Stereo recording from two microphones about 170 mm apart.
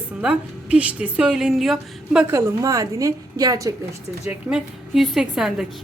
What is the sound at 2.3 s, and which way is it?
A woman's voice, 20° right (ahead or behind).